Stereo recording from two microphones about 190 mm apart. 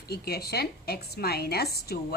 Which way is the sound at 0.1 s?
55° left (ahead or behind).